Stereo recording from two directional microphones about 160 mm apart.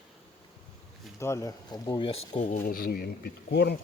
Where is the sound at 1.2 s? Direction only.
20° left (ahead or behind).